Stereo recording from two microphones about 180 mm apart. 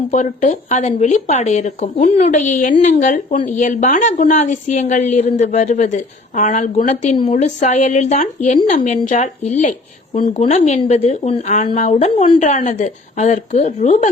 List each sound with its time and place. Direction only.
0.1 s a woman's voice: 45° left (ahead or behind)